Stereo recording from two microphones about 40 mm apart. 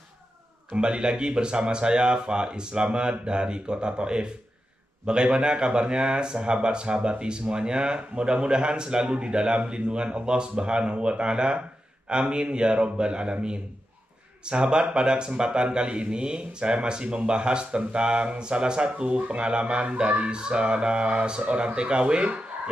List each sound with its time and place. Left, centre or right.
0.7 s speech: right